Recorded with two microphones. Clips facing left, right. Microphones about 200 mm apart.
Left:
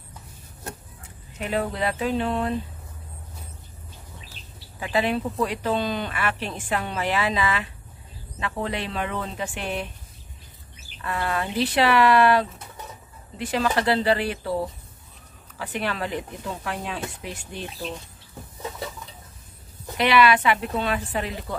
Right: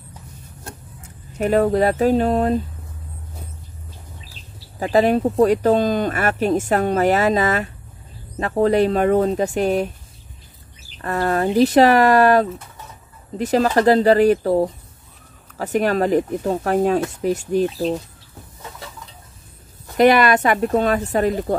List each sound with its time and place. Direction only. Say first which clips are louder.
1.4 s speech: right 10 dB; 45° right (ahead or behind)
4.7 s speech: right 8 dB; 40° right (ahead or behind)
11.0 s speech: right 7 dB; 45° right (ahead or behind)
20.0 s speech: right 6 dB; 45° right (ahead or behind)